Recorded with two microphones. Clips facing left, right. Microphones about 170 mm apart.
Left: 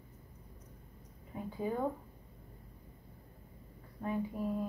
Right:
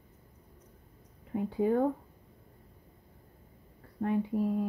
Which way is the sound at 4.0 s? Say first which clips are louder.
Right 7 dB; 70° right (ahead or behind).